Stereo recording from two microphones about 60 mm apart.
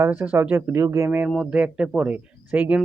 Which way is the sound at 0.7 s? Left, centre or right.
Right.